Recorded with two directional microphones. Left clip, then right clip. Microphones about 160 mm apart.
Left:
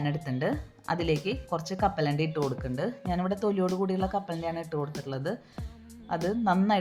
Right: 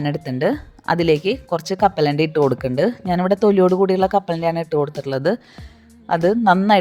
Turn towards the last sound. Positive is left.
turn(degrees=-55)  # may be behind; listen again after turning